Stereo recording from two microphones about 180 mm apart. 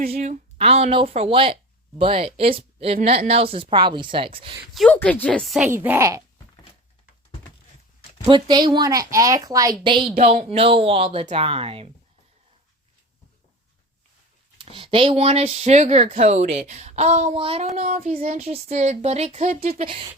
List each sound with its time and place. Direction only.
0.0 s speech: 50° right (ahead or behind); by 4.5 s 30° right (ahead or behind)
4.7 s speech: centre (ahead or behind)
5.6 s a woman's voice: 10° right (ahead or behind)
8.2 s a woman's voice: 25° right (ahead or behind)
10.2 s speech: 35° right (ahead or behind)
14.6 s speech: 30° right (ahead or behind); by 18.4 s 50° right (ahead or behind)
18.4 s speech: 35° right (ahead or behind)